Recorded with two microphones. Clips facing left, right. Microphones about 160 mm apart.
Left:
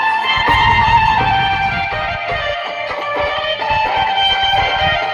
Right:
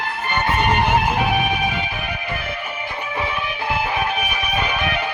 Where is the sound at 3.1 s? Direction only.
75° left (ahead or behind).